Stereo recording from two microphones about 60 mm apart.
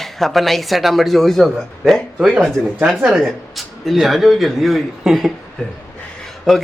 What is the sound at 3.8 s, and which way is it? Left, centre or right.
Speech, centre.